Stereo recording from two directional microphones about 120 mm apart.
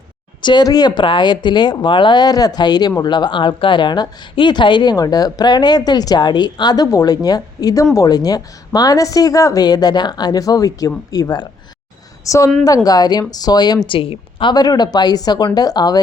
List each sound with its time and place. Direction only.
0.4 s a woman's voice: 35° left (ahead or behind)
13.8 s speech: 50° left (ahead or behind)